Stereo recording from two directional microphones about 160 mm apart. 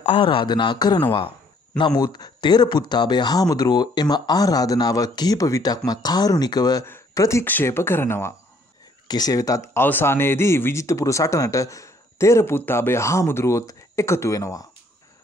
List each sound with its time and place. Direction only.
0.0 s speech: 30° left (ahead or behind)